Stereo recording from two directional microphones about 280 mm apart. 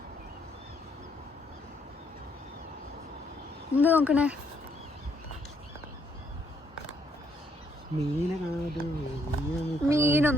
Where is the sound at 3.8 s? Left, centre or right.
Centre.